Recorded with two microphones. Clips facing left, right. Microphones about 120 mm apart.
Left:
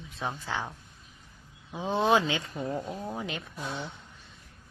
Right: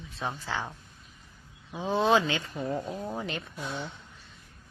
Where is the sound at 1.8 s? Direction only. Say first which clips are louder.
Even; 20° left (ahead or behind).